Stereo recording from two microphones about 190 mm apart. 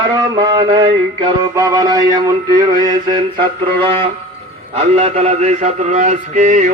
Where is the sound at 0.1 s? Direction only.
20° right (ahead or behind).